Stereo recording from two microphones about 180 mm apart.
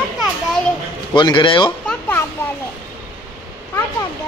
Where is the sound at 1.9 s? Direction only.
10° left (ahead or behind).